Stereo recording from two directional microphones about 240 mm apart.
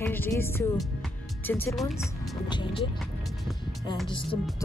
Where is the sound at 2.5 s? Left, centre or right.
Left.